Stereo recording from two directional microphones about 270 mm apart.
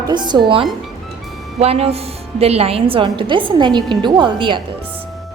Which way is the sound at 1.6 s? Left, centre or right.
Right.